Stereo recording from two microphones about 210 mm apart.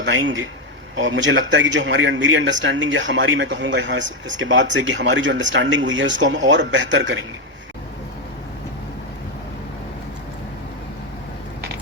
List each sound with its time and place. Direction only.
0.0 s a man's voice: 60° right (ahead or behind)